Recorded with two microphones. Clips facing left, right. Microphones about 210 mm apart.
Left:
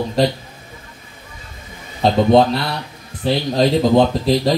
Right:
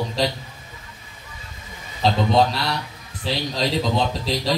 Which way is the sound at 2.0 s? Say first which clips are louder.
Left 4 dB; 55° left (ahead or behind).